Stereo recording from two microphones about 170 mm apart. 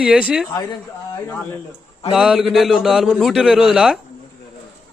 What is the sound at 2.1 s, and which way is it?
A man's voice, 5° right (ahead or behind).